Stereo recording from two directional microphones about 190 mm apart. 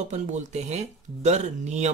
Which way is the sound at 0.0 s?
40° right (ahead or behind).